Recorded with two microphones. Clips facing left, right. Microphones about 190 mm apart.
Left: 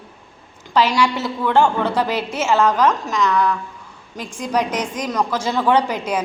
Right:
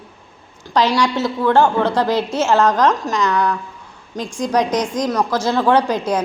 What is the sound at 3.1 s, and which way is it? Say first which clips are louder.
Speech: even; 35° right (ahead or behind).